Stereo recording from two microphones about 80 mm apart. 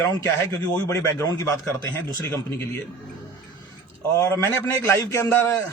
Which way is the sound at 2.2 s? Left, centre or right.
Left.